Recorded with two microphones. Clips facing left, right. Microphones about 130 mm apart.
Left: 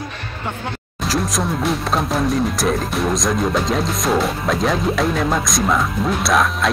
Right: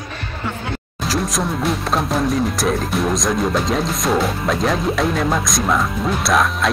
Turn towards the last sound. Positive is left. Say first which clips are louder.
# even
turn(degrees=0)  # may be behind; listen again after turning